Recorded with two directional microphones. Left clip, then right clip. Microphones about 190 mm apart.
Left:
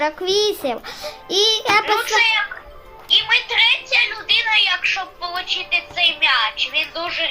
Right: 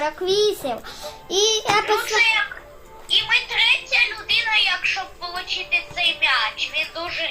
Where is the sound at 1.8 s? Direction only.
40° left (ahead or behind).